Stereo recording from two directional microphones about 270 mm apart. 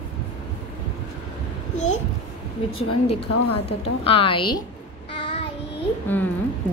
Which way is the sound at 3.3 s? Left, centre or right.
Left.